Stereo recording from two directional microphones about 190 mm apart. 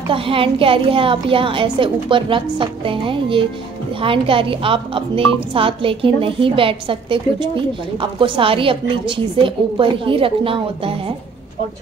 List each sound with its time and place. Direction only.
0.1 s a woman's voice: 30° right (ahead or behind)